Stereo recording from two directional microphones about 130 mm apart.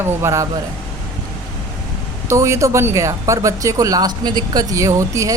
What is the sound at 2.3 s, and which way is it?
Speech, 20° right (ahead or behind).